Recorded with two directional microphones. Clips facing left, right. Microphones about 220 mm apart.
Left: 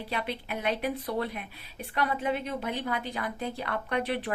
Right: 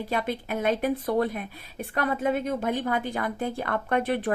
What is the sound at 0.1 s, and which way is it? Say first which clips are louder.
A woman's voice: right 4 dB; 45° right (ahead or behind).